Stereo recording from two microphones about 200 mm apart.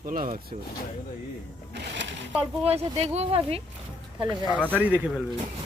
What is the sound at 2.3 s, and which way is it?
Speech, 30° right (ahead or behind).